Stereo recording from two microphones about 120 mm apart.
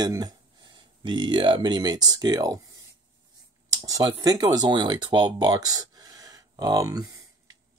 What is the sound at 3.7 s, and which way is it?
Speech, 30° right (ahead or behind).